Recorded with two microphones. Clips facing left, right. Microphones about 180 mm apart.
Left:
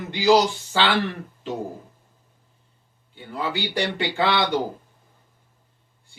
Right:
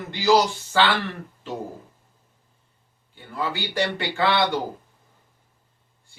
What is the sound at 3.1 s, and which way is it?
Speech, 15° left (ahead or behind).